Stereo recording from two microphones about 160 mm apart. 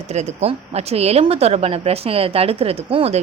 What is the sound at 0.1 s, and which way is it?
Speech, 45° right (ahead or behind).